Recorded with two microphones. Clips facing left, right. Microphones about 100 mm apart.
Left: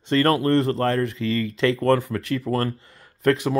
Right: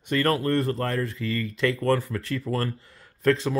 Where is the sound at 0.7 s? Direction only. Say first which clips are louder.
Left 5 dB; 75° left (ahead or behind).